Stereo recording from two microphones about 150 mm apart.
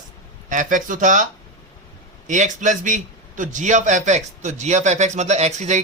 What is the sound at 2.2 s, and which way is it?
A man's voice, 55° right (ahead or behind).